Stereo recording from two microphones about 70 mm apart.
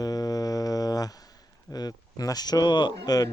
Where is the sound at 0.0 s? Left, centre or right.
Left.